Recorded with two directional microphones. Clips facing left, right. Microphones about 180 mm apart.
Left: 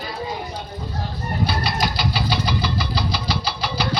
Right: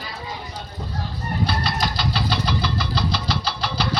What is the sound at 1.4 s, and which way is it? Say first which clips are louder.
Engine: left 1 dB; 5° left (ahead or behind).